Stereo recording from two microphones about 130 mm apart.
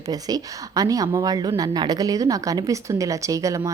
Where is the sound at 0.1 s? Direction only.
30° right (ahead or behind).